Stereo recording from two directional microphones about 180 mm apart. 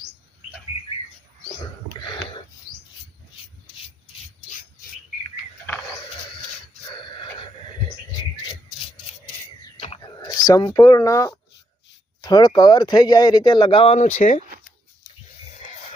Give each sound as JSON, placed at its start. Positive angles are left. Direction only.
{"t": 10.2, "sound": "speech", "side_deg": 20}